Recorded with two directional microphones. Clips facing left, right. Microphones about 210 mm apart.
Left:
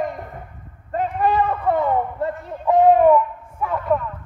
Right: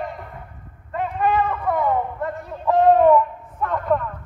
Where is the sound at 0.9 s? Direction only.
35° left (ahead or behind).